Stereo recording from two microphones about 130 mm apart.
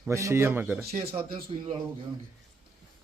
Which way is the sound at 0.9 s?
45° right (ahead or behind).